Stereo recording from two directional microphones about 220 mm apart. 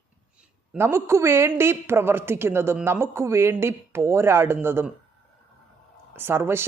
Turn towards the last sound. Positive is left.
turn(degrees=-10)  # may be behind; listen again after turning